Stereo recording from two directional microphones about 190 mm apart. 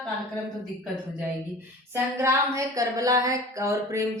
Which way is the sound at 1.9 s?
15° right (ahead or behind).